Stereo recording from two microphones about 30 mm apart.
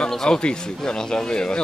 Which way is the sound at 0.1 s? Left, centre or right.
Centre.